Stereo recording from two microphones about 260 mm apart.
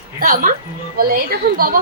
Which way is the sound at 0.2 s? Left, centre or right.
Right.